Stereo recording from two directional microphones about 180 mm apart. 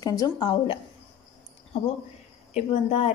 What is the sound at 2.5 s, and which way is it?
Speech, 35° left (ahead or behind).